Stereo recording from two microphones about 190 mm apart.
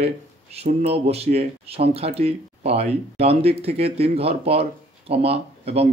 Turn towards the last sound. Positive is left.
turn(degrees=-30)  # may be behind; listen again after turning